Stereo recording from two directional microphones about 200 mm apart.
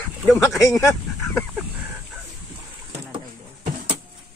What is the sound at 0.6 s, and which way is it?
Speech, 15° left (ahead or behind).